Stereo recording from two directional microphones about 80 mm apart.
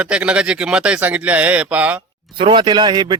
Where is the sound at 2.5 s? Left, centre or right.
Right.